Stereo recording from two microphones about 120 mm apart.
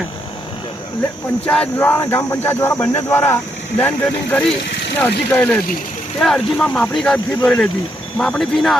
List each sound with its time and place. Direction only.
1.5 s speech: 10° left (ahead or behind)
6.1 s speech: 5° left (ahead or behind)